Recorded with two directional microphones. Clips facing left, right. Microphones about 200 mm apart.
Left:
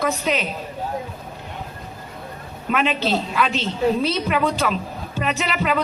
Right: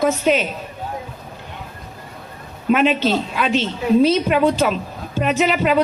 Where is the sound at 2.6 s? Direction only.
Centre (ahead or behind).